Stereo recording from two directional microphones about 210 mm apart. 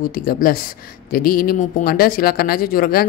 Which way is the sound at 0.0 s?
45° left (ahead or behind).